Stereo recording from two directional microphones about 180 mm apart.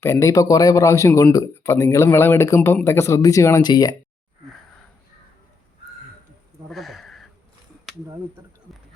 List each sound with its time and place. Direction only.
0.0 s speech: 15° left (ahead or behind)
6.7 s a sound: centre (ahead or behind)
8.7 s clip-clop: centre (ahead or behind)